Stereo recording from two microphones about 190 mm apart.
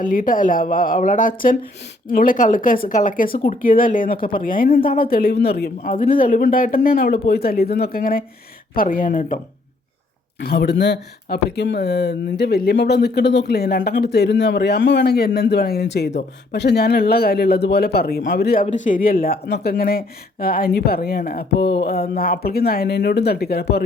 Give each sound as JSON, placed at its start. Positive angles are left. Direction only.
{"t": 0.0, "sound": "speech", "side_deg": 45}
{"t": 10.4, "sound": "speech", "side_deg": 60}
{"t": 18.6, "sound": "speech", "side_deg": 40}